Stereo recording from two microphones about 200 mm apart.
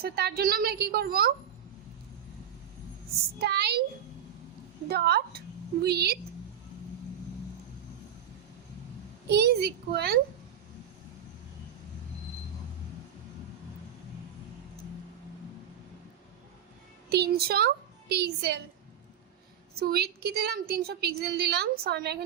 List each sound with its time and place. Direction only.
0.0 s a woman's voice: 50° right (ahead or behind)
3.3 s a woman's voice: 55° right (ahead or behind)
4.9 s a woman's voice: 50° right (ahead or behind)
9.3 s a child's voice: 55° right (ahead or behind)
17.1 s a child's voice: 50° right (ahead or behind)
19.8 s a woman's voice: 50° right (ahead or behind)